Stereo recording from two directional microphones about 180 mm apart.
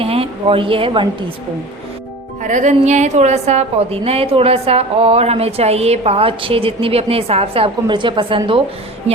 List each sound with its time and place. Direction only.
0.0 s speech: 30° right (ahead or behind)
2.4 s a woman's voice: 45° right (ahead or behind)